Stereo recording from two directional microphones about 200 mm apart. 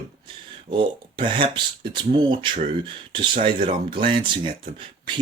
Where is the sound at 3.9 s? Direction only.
25° right (ahead or behind).